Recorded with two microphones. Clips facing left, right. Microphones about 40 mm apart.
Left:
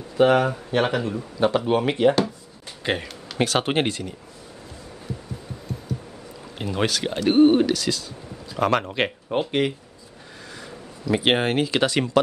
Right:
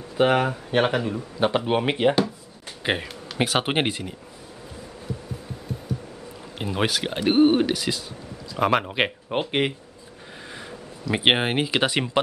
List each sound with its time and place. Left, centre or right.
0.2 s speech: centre
6.6 s speech: centre